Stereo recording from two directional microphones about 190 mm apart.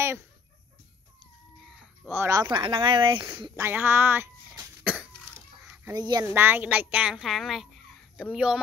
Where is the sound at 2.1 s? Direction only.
15° right (ahead or behind).